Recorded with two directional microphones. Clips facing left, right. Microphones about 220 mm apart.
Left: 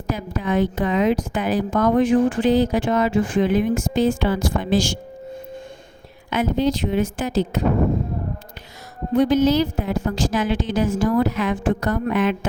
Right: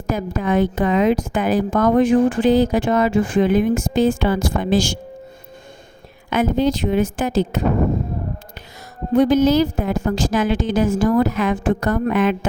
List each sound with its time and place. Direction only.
0.1 s a woman's voice: 45° right (ahead or behind)
6.3 s a woman's voice: 50° right (ahead or behind)
9.1 s a woman's voice: 45° right (ahead or behind)